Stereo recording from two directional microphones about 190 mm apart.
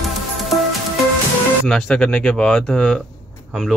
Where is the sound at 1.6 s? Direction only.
Centre (ahead or behind).